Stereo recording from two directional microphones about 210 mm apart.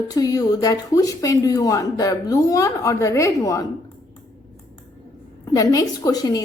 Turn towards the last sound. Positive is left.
turn(degrees=15)  # may be behind; listen again after turning